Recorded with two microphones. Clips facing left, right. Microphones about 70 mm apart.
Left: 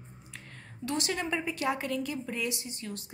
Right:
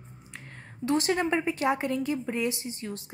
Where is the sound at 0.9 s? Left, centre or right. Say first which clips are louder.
Right 6 dB; right.